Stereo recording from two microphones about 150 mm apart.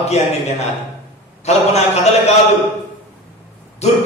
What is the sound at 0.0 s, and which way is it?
A man's voice, 45° left (ahead or behind).